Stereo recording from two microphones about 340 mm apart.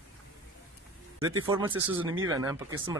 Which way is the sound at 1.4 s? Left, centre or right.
Centre.